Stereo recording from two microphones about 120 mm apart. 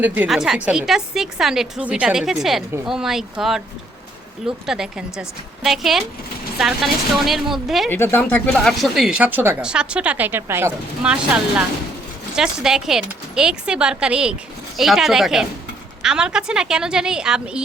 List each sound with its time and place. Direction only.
0.0 s speech: 15° right (ahead or behind)
0.3 s a woman's voice: 5° right (ahead or behind)
7.9 s speech: 20° left (ahead or behind)
8.6 s a woman's voice: centre (ahead or behind)